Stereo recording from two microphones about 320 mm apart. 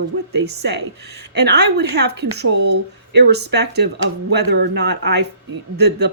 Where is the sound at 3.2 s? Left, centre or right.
Right.